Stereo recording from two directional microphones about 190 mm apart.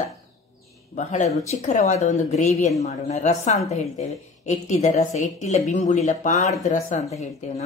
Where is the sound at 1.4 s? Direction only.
35° left (ahead or behind).